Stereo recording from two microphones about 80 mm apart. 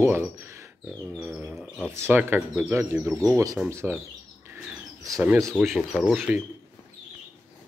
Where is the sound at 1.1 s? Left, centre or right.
Right.